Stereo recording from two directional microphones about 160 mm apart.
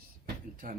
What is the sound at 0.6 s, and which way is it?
Speech, 60° right (ahead or behind).